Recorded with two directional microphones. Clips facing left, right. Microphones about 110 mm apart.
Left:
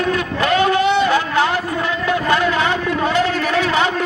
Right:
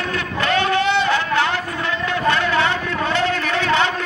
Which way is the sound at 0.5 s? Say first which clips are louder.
Left 3 dB; 15° left (ahead or behind).